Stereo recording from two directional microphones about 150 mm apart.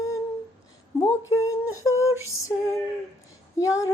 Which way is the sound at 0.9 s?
20° left (ahead or behind).